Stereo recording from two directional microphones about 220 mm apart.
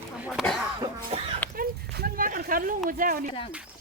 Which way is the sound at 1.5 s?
40° right (ahead or behind).